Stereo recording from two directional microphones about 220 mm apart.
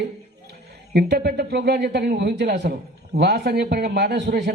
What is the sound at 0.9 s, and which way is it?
Speech, 45° right (ahead or behind).